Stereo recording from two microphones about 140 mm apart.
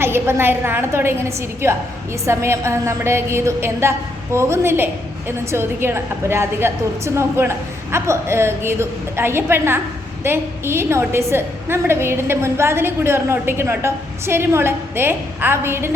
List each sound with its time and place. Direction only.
0.0 s a woman's voice: 15° right (ahead or behind)